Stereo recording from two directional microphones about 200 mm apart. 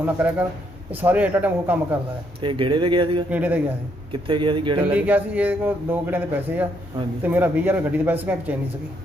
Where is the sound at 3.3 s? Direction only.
10° right (ahead or behind).